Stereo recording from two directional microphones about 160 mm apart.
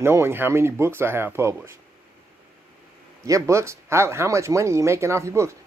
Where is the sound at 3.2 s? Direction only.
20° right (ahead or behind).